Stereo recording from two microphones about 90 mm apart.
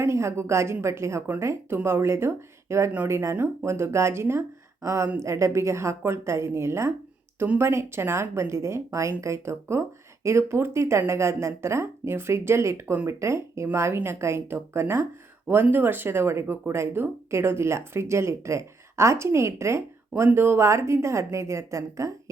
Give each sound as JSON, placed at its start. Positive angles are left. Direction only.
{"t": 0.0, "sound": "speech", "side_deg": -30}
{"t": 7.3, "sound": "speech", "side_deg": -20}
{"t": 7.6, "sound": "speech", "side_deg": -30}